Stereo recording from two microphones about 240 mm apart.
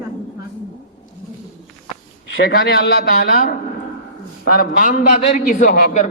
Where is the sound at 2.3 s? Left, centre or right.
Left.